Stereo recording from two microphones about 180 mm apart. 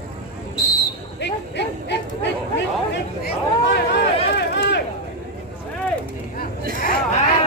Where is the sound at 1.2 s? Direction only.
70° left (ahead or behind).